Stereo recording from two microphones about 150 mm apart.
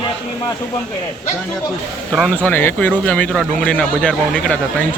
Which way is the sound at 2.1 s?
10° left (ahead or behind).